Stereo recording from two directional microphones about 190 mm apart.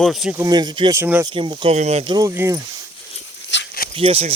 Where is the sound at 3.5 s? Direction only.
70° left (ahead or behind).